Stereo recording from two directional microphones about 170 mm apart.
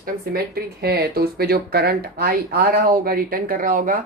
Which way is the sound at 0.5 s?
65° right (ahead or behind).